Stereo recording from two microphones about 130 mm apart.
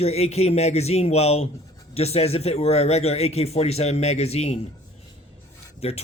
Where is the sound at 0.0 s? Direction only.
55° left (ahead or behind).